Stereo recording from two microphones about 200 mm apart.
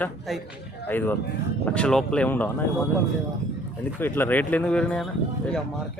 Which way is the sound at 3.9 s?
10° left (ahead or behind).